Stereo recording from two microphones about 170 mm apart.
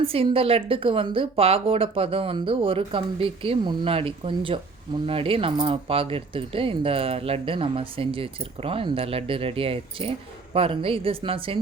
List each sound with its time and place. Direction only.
0.0 s speech: 35° right (ahead or behind)